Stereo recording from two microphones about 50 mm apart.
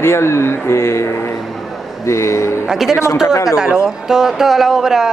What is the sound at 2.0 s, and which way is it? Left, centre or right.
Speech, left.